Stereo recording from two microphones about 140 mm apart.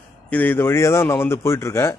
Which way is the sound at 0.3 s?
10° left (ahead or behind).